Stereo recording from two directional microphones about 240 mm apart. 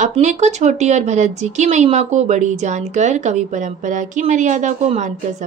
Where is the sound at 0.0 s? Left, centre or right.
Right.